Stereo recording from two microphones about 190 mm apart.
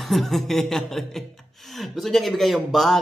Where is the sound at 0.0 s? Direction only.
Centre (ahead or behind).